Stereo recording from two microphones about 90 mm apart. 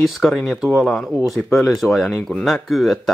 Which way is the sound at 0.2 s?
5° left (ahead or behind).